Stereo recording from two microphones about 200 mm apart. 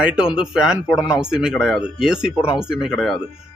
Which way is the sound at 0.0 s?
5° right (ahead or behind).